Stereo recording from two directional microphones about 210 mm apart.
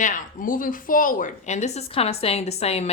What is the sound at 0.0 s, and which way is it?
A woman's voice, 40° left (ahead or behind).